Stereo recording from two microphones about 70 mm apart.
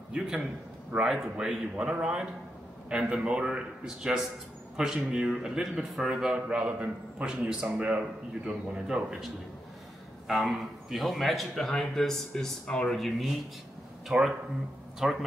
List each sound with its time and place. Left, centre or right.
0.1 s a man's voice: centre
6.3 s a man's voice: right; by 15.2 s centre